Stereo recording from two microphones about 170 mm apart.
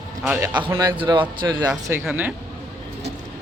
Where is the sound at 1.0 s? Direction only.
30° right (ahead or behind).